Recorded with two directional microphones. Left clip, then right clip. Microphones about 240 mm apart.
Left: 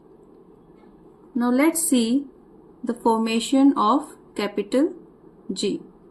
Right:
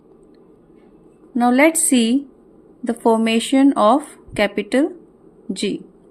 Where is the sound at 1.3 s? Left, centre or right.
Right.